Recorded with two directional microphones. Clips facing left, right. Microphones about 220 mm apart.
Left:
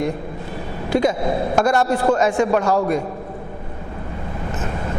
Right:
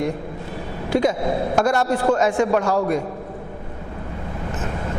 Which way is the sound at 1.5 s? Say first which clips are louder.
Left 2 dB; 20° left (ahead or behind).